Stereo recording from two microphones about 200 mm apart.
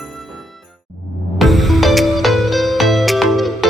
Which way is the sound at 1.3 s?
Centre (ahead or behind).